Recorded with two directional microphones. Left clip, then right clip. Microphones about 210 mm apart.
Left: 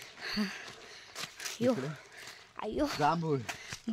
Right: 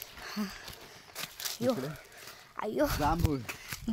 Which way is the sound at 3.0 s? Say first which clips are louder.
Left 1 dB; 35° left (ahead or behind).